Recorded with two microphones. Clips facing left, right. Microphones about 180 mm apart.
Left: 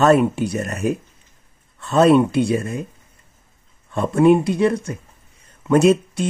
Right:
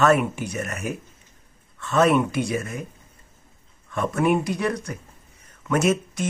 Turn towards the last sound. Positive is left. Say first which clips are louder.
# left 7 dB
turn(degrees=30)  # may be behind; listen again after turning